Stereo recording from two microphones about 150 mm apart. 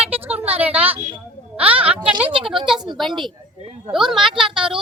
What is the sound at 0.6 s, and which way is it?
Speech, 10° right (ahead or behind).